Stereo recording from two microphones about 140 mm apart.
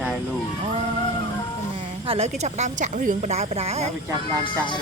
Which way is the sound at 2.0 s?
45° right (ahead or behind).